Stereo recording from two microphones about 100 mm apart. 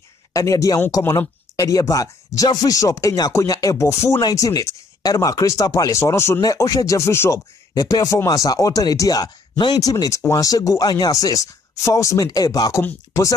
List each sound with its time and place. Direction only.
0.3 s speech: 35° left (ahead or behind)
6.4 s speech: 35° left (ahead or behind)